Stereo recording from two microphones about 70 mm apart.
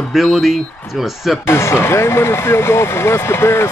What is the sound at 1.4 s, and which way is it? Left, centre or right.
Speech, left.